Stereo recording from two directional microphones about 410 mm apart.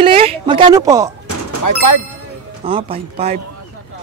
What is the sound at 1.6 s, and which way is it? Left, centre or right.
Speech, left.